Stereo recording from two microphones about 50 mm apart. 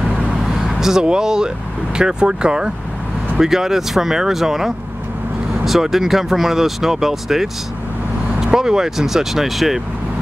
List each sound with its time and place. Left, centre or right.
0.4 s vehicle: centre
2.0 s speech: centre